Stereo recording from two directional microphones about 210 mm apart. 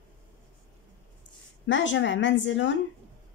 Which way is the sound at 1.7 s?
60° left (ahead or behind).